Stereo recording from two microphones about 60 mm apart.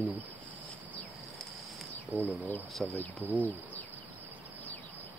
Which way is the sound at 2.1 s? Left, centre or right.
Right.